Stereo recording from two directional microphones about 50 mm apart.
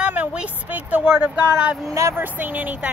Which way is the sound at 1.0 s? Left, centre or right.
Centre.